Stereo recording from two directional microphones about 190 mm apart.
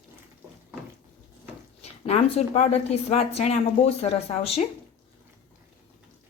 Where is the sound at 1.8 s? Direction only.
35° left (ahead or behind).